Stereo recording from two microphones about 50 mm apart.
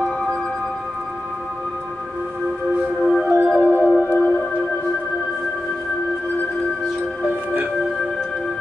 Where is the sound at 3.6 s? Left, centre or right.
Left.